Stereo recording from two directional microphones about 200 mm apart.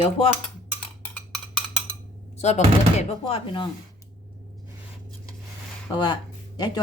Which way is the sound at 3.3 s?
25° left (ahead or behind).